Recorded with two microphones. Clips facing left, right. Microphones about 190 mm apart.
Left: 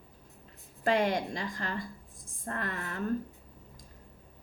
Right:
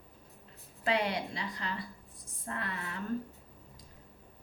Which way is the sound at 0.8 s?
45° left (ahead or behind).